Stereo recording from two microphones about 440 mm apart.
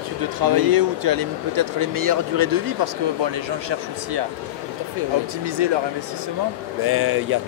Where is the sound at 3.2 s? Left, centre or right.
Right.